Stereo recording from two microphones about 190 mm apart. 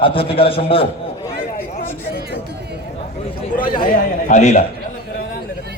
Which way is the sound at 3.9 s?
40° left (ahead or behind).